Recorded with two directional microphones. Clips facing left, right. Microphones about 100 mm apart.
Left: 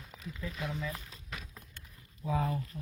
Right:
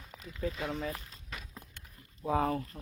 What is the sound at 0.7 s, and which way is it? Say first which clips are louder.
Speech: right 2 dB; 50° right (ahead or behind).